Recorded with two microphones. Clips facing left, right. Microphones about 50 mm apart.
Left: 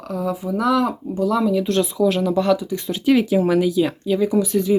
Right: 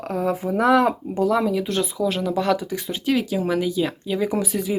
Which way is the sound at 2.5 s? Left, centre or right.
Right.